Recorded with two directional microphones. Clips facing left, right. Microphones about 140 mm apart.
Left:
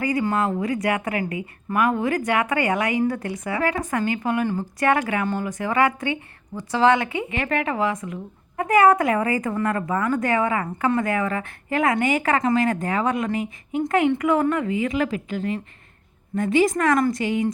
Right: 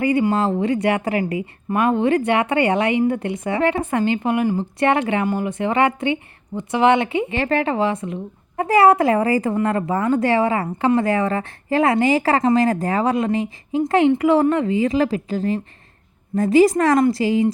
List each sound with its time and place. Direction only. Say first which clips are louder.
0.0 s speech: right 4 dB; 25° right (ahead or behind)